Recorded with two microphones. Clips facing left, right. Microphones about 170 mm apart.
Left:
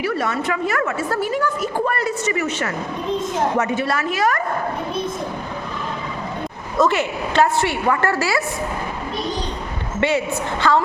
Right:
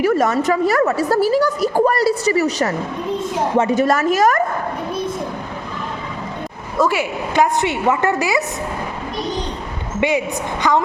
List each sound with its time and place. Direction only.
0.0 s a woman's voice: 40° right (ahead or behind)
6.7 s a woman's voice: 10° right (ahead or behind)
10.0 s a woman's voice: 15° right (ahead or behind)